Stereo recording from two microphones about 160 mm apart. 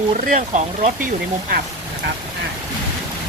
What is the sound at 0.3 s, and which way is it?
Speech, 50° right (ahead or behind).